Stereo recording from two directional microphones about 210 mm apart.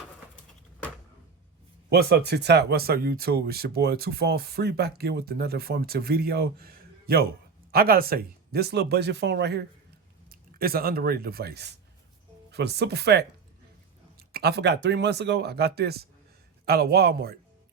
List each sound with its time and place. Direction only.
1.9 s speech: 50° right (ahead or behind)